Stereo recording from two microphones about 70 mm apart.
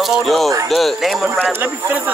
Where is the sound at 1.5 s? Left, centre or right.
Right.